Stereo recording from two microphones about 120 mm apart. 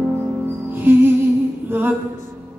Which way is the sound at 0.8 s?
15° right (ahead or behind).